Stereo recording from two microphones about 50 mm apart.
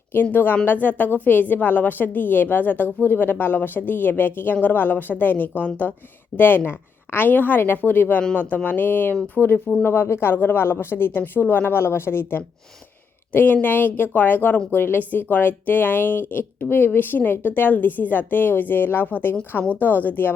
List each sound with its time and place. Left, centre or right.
0.1 s a woman's voice: left
9.8 s speech: left
13.3 s speech: left